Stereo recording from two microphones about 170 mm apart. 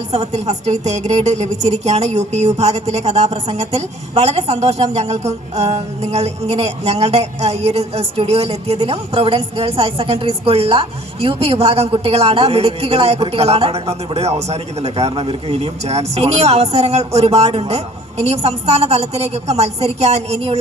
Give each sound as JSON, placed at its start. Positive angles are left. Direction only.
{"t": 0.1, "sound": "a woman's voice", "side_deg": -40}